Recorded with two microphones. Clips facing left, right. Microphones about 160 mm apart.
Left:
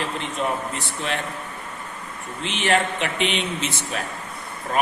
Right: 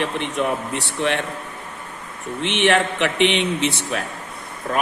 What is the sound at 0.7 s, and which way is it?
Speech, 75° right (ahead or behind).